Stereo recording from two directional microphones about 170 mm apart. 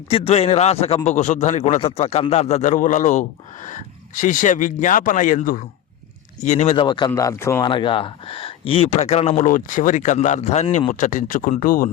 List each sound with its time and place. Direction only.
0.1 s a man's voice: 35° left (ahead or behind)
7.1 s speech: 15° left (ahead or behind)
7.6 s a man's voice: 30° left (ahead or behind)
11.0 s a man's voice: 50° left (ahead or behind)